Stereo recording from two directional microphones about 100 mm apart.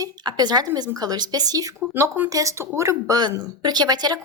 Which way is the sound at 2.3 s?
30° right (ahead or behind).